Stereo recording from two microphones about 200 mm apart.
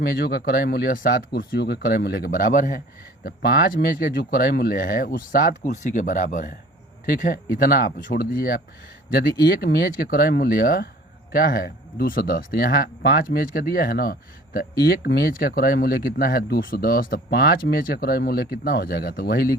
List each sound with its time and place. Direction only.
0.0 s speech: 50° left (ahead or behind)